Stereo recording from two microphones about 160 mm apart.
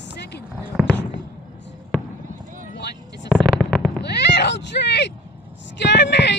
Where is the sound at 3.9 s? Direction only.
90° left.